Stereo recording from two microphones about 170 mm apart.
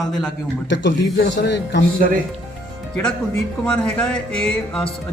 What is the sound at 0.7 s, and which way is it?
Speech, 90° left.